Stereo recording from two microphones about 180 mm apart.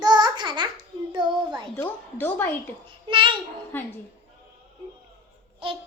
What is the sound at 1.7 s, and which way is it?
A woman's voice, 10° left (ahead or behind).